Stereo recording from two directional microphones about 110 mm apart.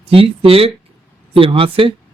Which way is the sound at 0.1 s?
60° right (ahead or behind).